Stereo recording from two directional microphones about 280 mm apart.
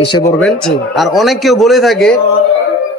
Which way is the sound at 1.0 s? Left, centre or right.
Centre.